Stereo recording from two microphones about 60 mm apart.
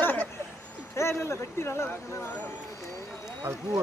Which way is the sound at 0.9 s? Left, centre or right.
Left.